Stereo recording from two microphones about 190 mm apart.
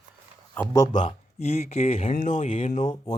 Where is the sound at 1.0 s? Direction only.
35° left (ahead or behind).